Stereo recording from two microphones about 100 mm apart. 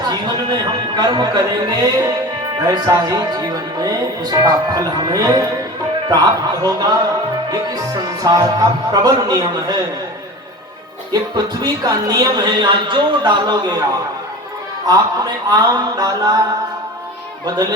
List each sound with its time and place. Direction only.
0.1 s speech: 45° right (ahead or behind)
8.2 s speech: 40° right (ahead or behind)
11.1 s speech: 40° right (ahead or behind)
14.8 s speech: 40° right (ahead or behind)